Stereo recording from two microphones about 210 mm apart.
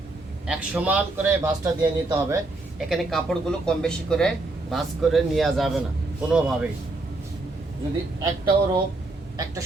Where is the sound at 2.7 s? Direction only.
Centre (ahead or behind).